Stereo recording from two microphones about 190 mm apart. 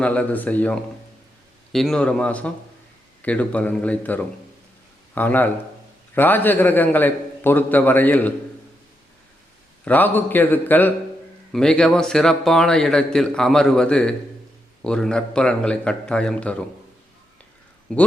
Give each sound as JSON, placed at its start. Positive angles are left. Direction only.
{"t": 0.0, "sound": "a man's voice", "side_deg": 5}
{"t": 9.8, "sound": "a man's voice", "side_deg": 10}
{"t": 17.9, "sound": "a man's voice", "side_deg": 5}